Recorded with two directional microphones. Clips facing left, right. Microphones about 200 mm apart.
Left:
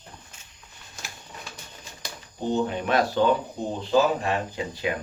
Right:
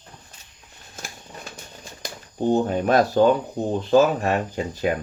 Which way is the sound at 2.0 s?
45° right (ahead or behind).